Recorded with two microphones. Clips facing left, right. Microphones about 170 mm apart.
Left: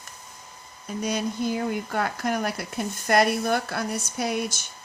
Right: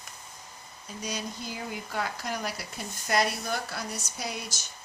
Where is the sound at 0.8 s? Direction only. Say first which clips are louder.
Left 9 dB; 55° left (ahead or behind).